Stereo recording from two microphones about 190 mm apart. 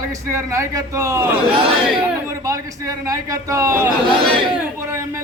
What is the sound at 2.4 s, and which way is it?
A man's voice, 15° right (ahead or behind).